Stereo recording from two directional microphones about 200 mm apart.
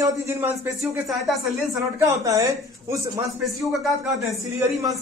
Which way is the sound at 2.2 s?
15° right (ahead or behind).